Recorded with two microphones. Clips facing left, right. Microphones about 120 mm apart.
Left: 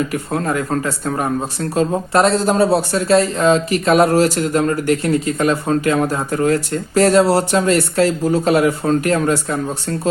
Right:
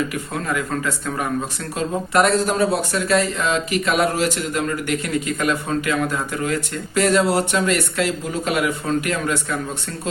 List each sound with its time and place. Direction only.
0.1 s speech: 35° left (ahead or behind)